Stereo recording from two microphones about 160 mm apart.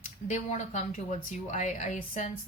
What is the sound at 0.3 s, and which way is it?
Speech, 50° left (ahead or behind).